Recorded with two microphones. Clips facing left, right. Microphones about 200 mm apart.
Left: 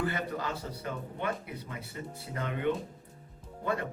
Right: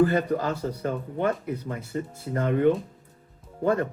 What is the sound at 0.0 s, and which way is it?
Speech, 45° right (ahead or behind).